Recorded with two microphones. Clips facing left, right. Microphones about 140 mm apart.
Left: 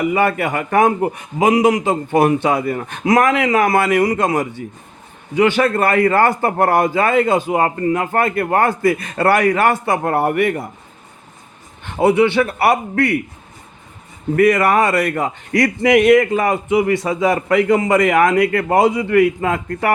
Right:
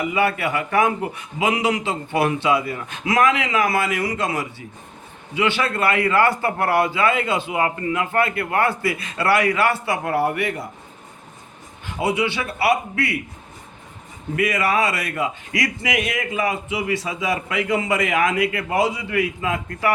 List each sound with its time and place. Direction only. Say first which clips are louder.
0.0 s a man's voice: left 4 dB; 50° left (ahead or behind)
11.8 s a man's voice: left 8 dB; 60° left (ahead or behind)
14.3 s a man's voice: left 7 dB; 50° left (ahead or behind)